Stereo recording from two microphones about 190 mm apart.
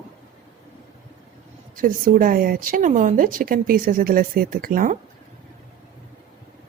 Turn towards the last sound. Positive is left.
turn(degrees=-45)  # may be behind; listen again after turning